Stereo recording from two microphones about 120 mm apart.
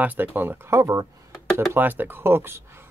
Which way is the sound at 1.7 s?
15° right (ahead or behind).